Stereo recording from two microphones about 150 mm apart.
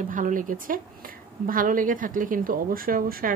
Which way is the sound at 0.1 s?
60° right (ahead or behind).